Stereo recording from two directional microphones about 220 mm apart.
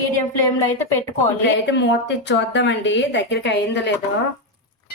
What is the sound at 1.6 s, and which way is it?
A woman's voice, 55° left (ahead or behind).